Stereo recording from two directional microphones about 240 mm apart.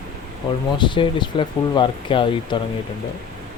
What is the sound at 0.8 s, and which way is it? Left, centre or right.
Speech, centre.